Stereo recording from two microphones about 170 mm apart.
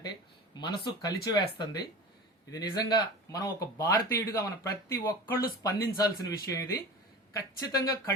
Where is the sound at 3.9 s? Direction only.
60° left (ahead or behind).